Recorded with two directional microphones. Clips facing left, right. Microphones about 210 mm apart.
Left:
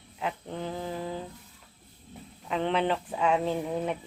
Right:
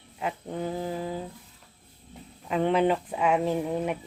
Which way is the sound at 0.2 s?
10° right (ahead or behind).